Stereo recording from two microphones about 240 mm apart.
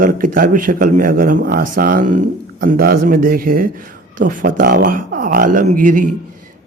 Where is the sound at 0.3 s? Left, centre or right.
Right.